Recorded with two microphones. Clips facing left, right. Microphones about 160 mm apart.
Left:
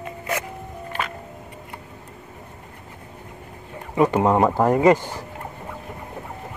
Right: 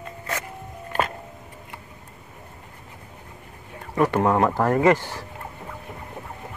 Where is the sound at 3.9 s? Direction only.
15° left (ahead or behind).